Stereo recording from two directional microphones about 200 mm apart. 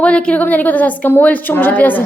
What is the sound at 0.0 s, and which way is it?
Child singing, 5° left (ahead or behind).